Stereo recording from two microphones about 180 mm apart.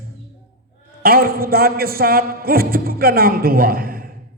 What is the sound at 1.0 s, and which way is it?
A man's voice, 55° right (ahead or behind).